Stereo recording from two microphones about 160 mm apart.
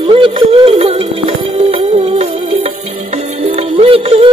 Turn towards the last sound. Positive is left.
turn(degrees=-35)  # may be behind; listen again after turning